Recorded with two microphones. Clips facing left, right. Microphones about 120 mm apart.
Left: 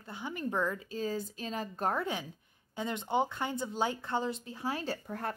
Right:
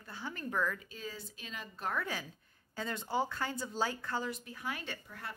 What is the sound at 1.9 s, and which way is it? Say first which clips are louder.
Speech: left 4 dB; 20° left (ahead or behind).